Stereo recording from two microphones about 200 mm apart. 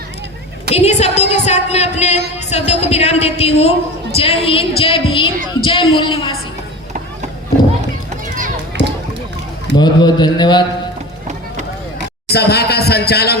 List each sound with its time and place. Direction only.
0.7 s a woman's voice: 35° left (ahead or behind)
8.7 s a sound: 60° right (ahead or behind)
9.7 s speech: 20° left (ahead or behind)
12.3 s a man's voice: 55° left (ahead or behind)